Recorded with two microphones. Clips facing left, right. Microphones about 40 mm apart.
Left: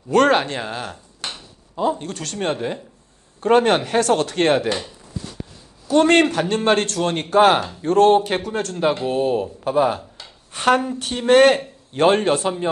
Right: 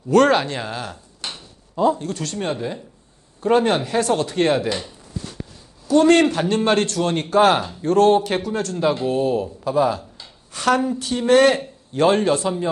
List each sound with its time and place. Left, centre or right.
0.1 s speech: left
1.3 s a sound: centre
2.0 s speech: left
5.9 s a man's voice: left